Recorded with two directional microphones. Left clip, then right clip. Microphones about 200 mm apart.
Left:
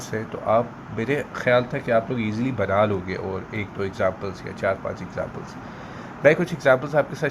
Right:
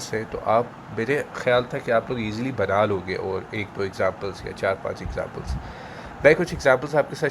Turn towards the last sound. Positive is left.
turn(degrees=-15)  # may be behind; listen again after turning